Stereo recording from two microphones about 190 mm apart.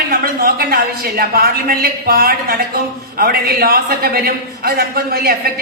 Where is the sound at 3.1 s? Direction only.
50° right (ahead or behind).